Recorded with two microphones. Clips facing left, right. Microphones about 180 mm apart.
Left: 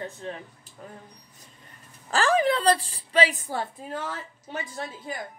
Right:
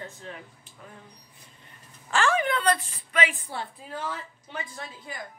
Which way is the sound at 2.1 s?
35° left (ahead or behind).